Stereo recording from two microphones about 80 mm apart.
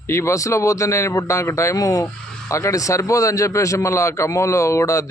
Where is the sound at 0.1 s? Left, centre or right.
Left.